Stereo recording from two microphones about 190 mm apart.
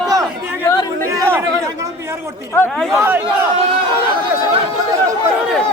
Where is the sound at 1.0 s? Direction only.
15° right (ahead or behind).